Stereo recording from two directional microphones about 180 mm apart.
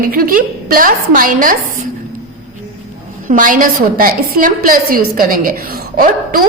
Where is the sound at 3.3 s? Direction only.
50° right (ahead or behind).